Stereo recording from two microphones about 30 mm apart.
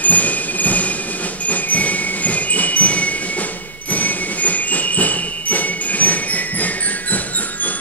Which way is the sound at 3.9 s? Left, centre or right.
Left.